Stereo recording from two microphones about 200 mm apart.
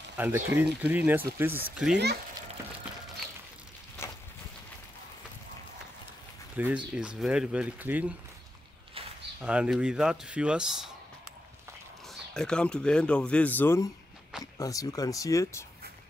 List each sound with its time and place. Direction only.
0.2 s speech: 10° right (ahead or behind)
6.5 s speech: 10° right (ahead or behind)
9.4 s speech: 5° right (ahead or behind)
12.1 s speech: 5° left (ahead or behind)